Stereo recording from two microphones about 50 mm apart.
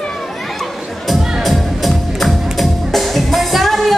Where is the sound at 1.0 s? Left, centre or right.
Centre.